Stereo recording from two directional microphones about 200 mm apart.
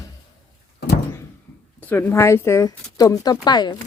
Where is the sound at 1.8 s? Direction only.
10° left (ahead or behind).